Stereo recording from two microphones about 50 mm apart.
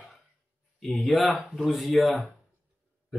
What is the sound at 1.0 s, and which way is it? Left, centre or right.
Speech, left.